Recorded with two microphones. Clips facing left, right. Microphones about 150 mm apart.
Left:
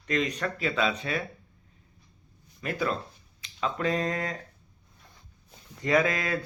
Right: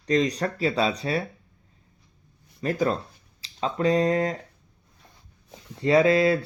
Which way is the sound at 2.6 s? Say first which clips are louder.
Right 5 dB; 35° right (ahead or behind).